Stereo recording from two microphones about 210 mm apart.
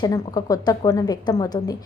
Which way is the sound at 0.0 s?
15° left (ahead or behind).